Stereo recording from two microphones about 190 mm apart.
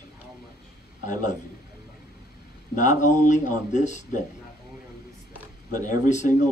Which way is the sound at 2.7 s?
40° left (ahead or behind).